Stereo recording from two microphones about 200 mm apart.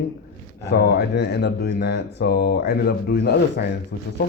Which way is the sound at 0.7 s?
55° left (ahead or behind).